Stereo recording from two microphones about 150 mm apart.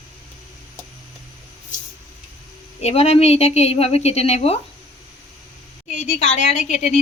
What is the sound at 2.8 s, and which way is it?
Speech, 45° left (ahead or behind).